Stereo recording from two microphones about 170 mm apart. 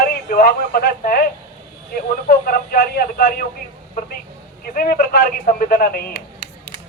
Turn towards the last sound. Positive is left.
turn(degrees=65)  # may be behind; listen again after turning